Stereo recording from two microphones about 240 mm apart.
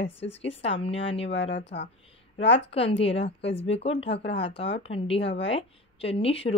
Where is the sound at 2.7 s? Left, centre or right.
Left.